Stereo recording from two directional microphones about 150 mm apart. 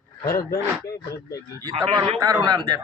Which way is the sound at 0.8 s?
20° left (ahead or behind).